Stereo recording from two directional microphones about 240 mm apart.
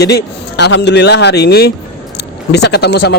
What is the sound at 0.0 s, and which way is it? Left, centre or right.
Speech, left.